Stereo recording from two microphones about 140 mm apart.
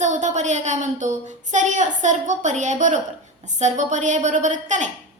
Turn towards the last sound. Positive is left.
turn(degrees=-60)  # may be behind; listen again after turning